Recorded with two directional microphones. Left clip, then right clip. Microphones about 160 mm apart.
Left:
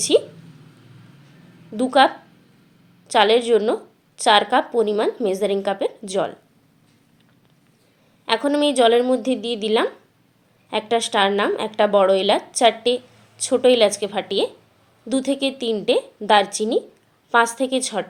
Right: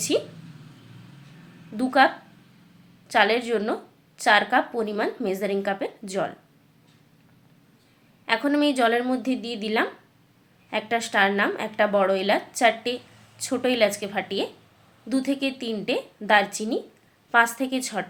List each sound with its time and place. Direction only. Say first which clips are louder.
0.1 s a sound: left 8 dB; 15° left (ahead or behind)
1.7 s a woman's voice: left 4 dB; 10° left (ahead or behind)
3.1 s a woman's voice: left 5 dB; 15° left (ahead or behind)
8.2 s a woman's voice: left 3 dB; 15° left (ahead or behind)